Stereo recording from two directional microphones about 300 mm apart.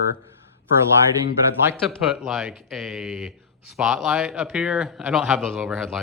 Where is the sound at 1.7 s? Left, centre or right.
Centre.